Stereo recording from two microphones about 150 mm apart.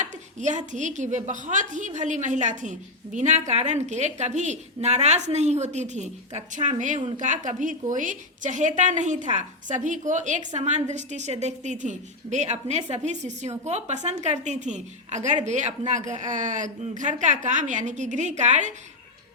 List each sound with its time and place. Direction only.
0.0 s a woman's voice: 55° right (ahead or behind)